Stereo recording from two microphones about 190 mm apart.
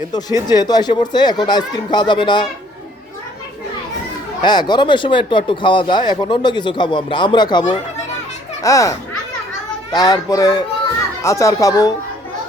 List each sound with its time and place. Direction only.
0.1 s speech: 20° left (ahead or behind)
4.4 s speech: 25° left (ahead or behind)
8.6 s speech: 15° left (ahead or behind)